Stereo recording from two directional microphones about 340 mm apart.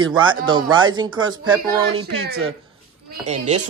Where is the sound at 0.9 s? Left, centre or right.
Centre.